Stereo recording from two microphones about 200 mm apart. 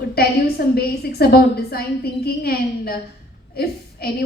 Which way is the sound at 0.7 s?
50° left (ahead or behind).